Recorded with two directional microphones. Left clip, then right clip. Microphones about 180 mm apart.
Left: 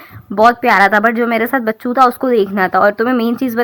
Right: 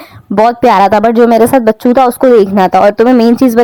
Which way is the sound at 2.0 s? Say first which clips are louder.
Right 7 dB; 40° right (ahead or behind).